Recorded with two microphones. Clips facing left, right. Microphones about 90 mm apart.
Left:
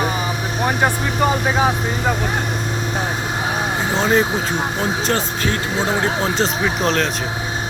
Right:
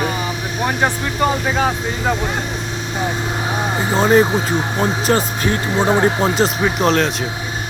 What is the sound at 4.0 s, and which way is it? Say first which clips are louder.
Speech: right 5 dB; 5° right (ahead or behind).